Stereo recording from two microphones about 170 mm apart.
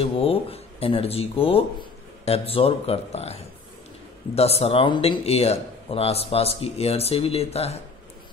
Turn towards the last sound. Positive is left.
turn(degrees=40)  # may be behind; listen again after turning